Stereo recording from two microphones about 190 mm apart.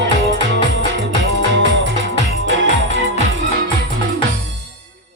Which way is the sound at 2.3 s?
90° right.